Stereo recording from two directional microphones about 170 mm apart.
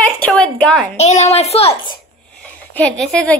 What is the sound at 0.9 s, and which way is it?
Speech, 40° left (ahead or behind).